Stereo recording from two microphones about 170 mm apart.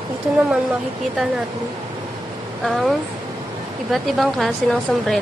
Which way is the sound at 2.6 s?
Centre (ahead or behind).